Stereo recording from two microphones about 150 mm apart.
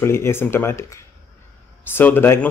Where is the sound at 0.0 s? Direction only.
15° left (ahead or behind).